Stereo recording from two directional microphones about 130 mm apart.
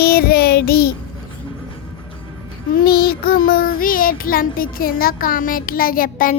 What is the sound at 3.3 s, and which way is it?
Child singing, 90° left.